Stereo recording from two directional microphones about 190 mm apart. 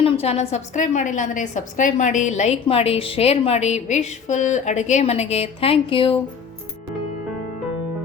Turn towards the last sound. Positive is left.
turn(degrees=30)  # may be behind; listen again after turning